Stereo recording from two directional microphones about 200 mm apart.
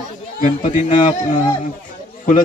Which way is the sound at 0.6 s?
40° left (ahead or behind).